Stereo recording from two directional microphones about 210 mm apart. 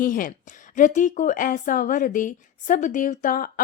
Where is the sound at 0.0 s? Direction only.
40° left (ahead or behind).